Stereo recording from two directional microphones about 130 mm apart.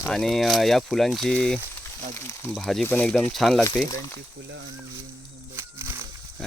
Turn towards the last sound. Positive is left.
turn(degrees=-20)  # may be behind; listen again after turning